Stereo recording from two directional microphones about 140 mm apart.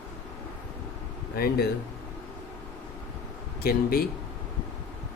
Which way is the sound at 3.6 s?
90° left.